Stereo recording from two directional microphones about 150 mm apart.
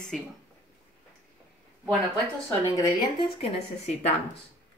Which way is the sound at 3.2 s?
40° left (ahead or behind).